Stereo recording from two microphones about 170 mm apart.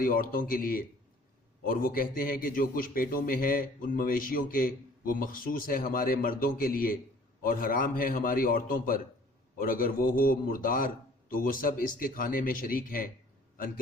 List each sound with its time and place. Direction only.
0.0 s a man's voice: 55° left (ahead or behind)